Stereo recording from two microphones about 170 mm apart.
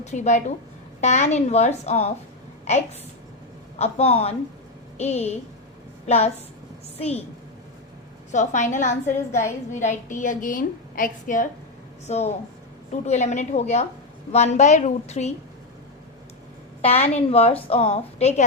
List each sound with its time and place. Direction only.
0.0 s a woman's voice: 45° left (ahead or behind)
3.8 s a woman's voice: 40° left (ahead or behind)
8.3 s a woman's voice: 45° left (ahead or behind)
12.0 s a woman's voice: 40° left (ahead or behind)
16.8 s a woman's voice: 40° left (ahead or behind)